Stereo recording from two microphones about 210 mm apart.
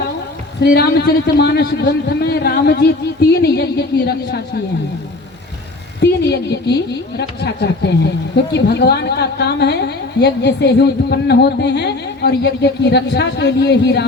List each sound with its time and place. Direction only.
0.6 s a woman's voice: 50° left (ahead or behind)
6.0 s a woman's voice: 55° left (ahead or behind)